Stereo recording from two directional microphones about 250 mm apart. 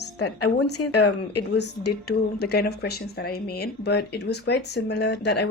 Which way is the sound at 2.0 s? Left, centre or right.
Left.